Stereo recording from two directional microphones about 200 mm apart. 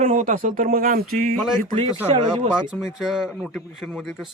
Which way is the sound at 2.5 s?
Centre (ahead or behind).